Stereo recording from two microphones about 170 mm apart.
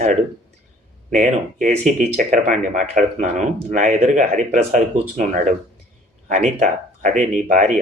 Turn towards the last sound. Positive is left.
turn(degrees=-50)  # may be behind; listen again after turning